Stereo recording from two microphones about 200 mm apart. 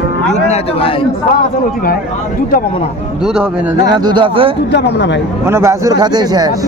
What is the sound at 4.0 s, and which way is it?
Speech, 25° right (ahead or behind).